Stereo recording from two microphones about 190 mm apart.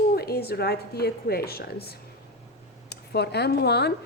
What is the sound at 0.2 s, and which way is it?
A woman's voice, 55° left (ahead or behind).